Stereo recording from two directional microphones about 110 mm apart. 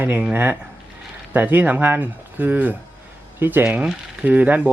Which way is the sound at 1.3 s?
15° right (ahead or behind).